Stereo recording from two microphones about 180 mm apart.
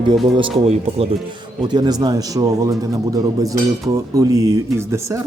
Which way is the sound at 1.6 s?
25° right (ahead or behind).